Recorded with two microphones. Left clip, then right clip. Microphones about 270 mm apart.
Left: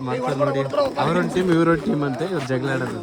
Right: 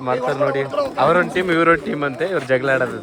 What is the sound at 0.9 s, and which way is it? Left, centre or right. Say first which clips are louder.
Speech: right 6 dB; centre.